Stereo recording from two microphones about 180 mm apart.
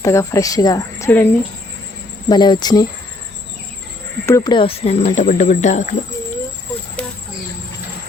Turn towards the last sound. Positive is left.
turn(degrees=5)  # may be behind; listen again after turning